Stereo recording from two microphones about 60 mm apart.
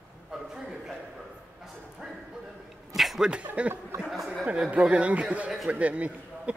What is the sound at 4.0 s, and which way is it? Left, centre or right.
Speech, centre.